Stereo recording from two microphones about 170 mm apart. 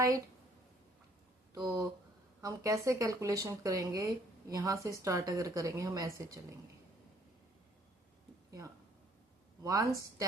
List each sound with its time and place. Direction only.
1.5 s speech: 20° right (ahead or behind)
9.6 s speech: 20° right (ahead or behind)